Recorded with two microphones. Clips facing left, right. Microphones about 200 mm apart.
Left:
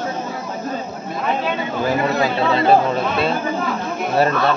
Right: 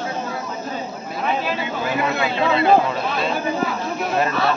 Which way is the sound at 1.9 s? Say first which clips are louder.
Left 3 dB; 35° left (ahead or behind).